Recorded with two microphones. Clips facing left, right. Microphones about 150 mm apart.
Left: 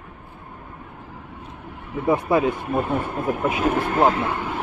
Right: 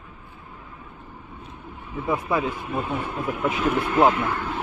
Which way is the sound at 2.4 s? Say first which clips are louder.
Left 5 dB; 55° left (ahead or behind).